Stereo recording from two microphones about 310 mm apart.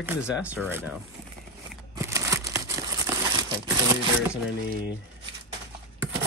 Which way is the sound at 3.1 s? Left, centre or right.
Centre.